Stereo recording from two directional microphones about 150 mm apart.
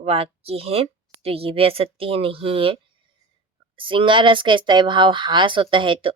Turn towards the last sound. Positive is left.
turn(degrees=-35)  # may be behind; listen again after turning